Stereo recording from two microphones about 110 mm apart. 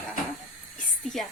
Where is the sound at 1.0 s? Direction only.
Centre (ahead or behind).